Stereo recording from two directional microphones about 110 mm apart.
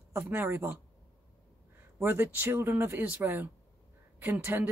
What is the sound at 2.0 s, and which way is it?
Speech, 20° right (ahead or behind).